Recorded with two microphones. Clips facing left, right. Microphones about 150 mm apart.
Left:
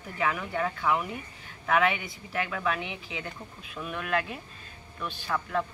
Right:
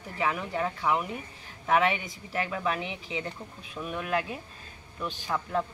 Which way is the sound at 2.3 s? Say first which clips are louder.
Right 1 dB; 15° right (ahead or behind).